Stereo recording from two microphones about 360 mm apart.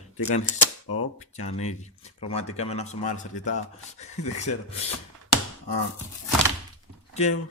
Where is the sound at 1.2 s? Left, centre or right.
Centre.